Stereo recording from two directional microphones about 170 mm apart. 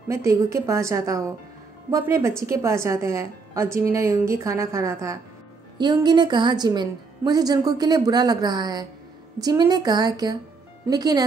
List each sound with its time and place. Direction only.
0.1 s a woman's voice: 15° right (ahead or behind)